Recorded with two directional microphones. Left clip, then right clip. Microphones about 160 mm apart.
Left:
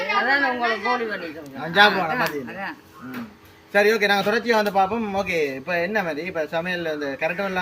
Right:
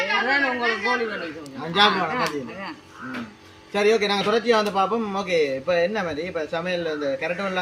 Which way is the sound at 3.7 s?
25° left (ahead or behind).